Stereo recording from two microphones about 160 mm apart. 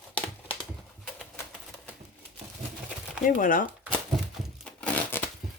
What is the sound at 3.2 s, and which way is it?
Speech, 55° left (ahead or behind).